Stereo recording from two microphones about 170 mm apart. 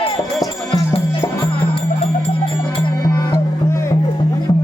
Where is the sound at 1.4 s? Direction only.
30° left (ahead or behind).